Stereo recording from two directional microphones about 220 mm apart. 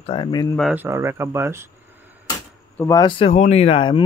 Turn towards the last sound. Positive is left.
turn(degrees=25)  # may be behind; listen again after turning